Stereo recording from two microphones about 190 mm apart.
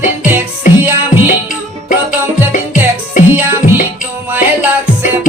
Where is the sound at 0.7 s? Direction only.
45° left (ahead or behind).